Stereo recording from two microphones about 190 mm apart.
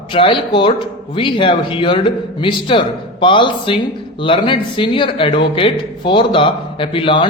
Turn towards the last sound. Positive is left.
turn(degrees=25)  # may be behind; listen again after turning